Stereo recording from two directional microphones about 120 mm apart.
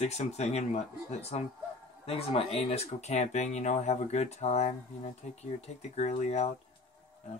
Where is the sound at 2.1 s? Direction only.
55° left (ahead or behind); by 6.4 s 70° left (ahead or behind).